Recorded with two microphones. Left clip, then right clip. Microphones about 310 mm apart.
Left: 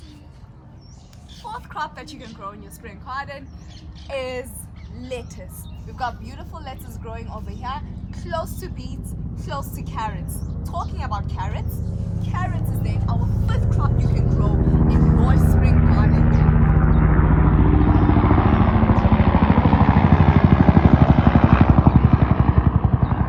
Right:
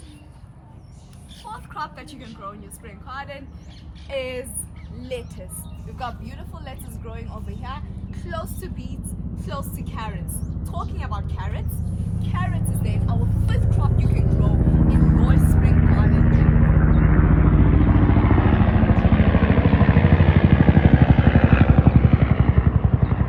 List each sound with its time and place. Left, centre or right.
1.5 s speech: centre
6.0 s speech: centre
14.9 s vehicle: centre
15.7 s vehicle: left